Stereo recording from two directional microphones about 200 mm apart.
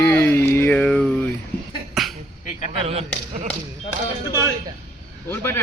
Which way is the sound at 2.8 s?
30° right (ahead or behind).